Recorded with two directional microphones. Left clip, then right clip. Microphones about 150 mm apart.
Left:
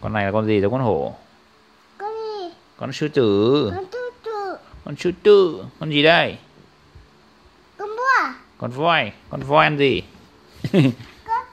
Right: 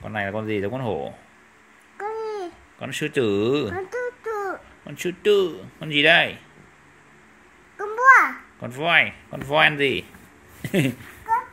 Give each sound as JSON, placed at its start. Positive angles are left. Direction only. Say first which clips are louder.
{"t": 0.0, "sound": "speech", "louder": "left 6 dB", "side_deg": 50}
{"t": 2.0, "sound": "babbling", "louder": "left 1 dB", "side_deg": 30}
{"t": 4.8, "sound": "speech", "louder": "left 6 dB", "side_deg": 50}
{"t": 7.7, "sound": "babbling", "louder": "right 4 dB", "side_deg": 35}
{"t": 10.6, "sound": "a sound", "louder": "left 5 dB", "side_deg": 45}